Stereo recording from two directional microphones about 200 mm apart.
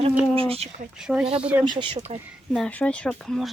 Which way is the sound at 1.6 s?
25° right (ahead or behind).